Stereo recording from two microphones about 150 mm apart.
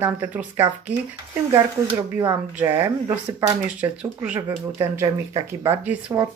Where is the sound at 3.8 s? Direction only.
10° right (ahead or behind).